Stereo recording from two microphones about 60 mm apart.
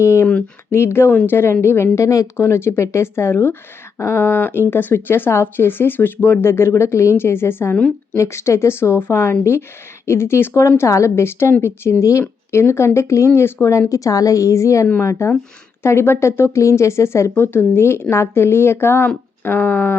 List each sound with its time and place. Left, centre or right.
0.0 s speech: left
2.0 s a woman's voice: left
2.3 s speech: left